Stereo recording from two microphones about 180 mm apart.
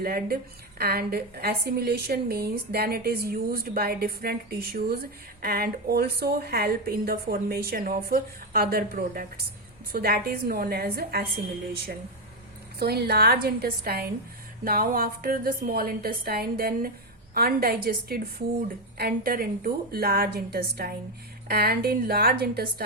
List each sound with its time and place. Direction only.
0.0 s a woman's voice: 55° right (ahead or behind)
12.8 s a woman's voice: 65° right (ahead or behind)